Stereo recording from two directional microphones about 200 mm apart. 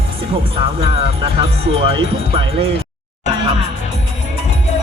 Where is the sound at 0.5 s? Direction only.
30° right (ahead or behind).